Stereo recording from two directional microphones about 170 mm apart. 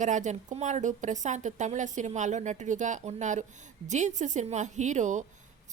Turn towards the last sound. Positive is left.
turn(degrees=-45)  # may be behind; listen again after turning